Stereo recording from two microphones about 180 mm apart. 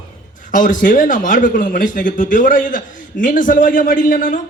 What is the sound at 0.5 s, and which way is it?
A man's voice, 50° left (ahead or behind).